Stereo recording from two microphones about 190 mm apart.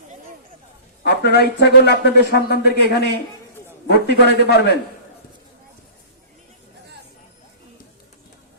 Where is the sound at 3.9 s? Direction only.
60° left (ahead or behind).